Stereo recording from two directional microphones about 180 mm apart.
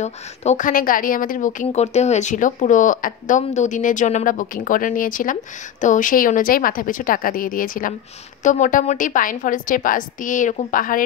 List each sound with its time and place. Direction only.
0.0 s a woman's voice: 40° left (ahead or behind)